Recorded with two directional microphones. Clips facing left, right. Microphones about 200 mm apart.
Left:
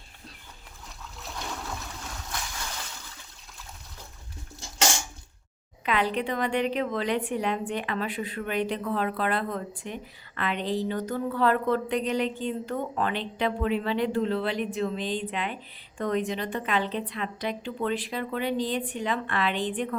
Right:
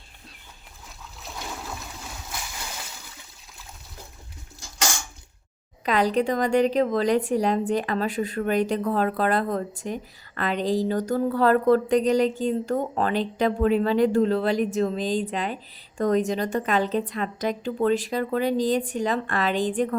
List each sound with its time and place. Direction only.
1.2 s splash: 5° right (ahead or behind)
5.8 s a woman's voice: 40° right (ahead or behind)